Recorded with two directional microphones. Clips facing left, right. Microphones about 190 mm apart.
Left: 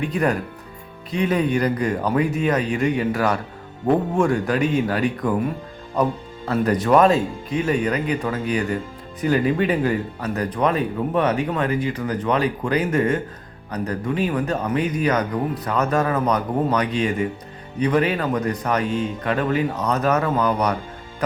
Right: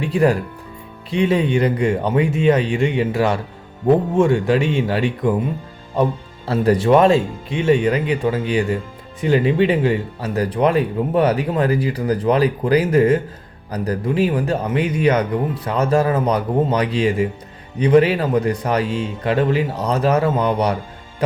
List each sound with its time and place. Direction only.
0.0 s speech: 30° right (ahead or behind)